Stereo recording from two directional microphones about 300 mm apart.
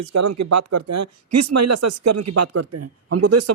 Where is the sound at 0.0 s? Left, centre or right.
Right.